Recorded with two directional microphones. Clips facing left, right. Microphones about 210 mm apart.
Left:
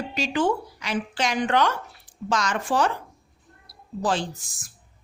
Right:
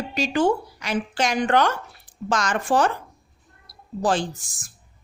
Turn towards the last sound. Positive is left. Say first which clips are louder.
# right 3 dB
turn(degrees=-45)  # may be behind; listen again after turning